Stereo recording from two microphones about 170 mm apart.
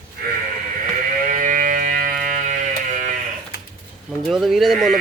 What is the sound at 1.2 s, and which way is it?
Sheep, 50° right (ahead or behind).